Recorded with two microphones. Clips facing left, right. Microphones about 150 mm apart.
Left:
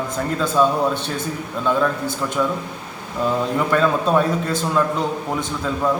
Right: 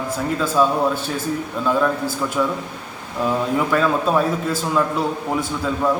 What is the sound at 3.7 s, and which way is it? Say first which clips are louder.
A man's voice: left 3 dB; 5° right (ahead or behind).